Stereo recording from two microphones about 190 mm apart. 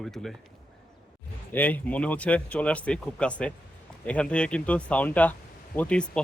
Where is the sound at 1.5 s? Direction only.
10° left (ahead or behind).